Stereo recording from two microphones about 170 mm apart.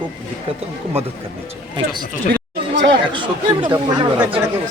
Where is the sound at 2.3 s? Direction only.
80° right.